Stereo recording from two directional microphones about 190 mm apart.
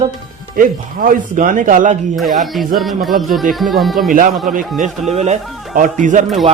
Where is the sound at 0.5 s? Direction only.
45° right (ahead or behind).